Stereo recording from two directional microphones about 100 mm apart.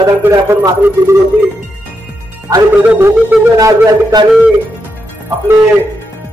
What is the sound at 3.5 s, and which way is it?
Speech, 35° right (ahead or behind).